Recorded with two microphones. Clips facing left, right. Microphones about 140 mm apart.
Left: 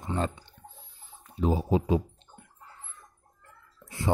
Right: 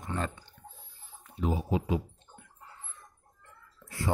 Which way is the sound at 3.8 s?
25° left (ahead or behind).